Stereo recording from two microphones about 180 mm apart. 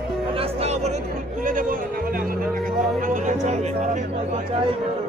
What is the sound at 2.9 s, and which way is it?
Music, 45° right (ahead or behind).